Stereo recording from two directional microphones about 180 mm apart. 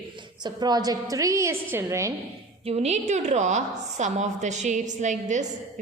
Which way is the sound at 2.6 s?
35° right (ahead or behind).